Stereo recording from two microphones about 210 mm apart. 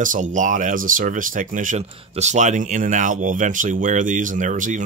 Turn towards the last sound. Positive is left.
turn(degrees=-35)  # may be behind; listen again after turning